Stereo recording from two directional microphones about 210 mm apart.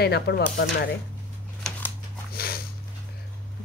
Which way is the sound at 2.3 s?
45° left (ahead or behind).